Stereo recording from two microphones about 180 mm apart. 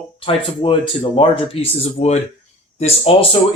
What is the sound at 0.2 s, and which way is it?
Speech, 30° left (ahead or behind).